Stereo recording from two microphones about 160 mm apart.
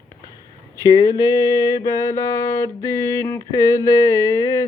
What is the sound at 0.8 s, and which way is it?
Mantra, 25° left (ahead or behind).